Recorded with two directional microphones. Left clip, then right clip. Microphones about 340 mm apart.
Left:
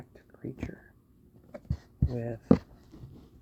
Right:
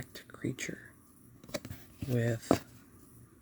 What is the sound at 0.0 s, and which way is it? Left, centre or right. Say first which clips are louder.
Whispering: right 4 dB; right.